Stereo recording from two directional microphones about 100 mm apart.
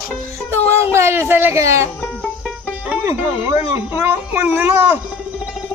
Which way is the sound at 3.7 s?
25° right (ahead or behind).